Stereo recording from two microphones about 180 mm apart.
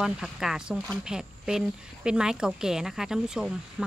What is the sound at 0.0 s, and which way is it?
Speech, 5° right (ahead or behind).